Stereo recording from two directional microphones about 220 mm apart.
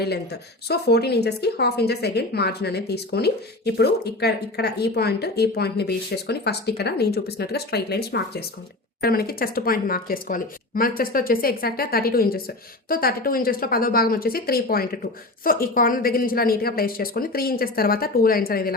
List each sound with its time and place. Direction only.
0.0 s a woman's voice: 45° left (ahead or behind)